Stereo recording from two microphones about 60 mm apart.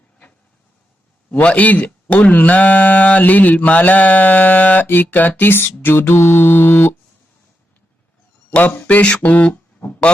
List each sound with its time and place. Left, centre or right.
1.3 s speech: left
8.4 s speech: left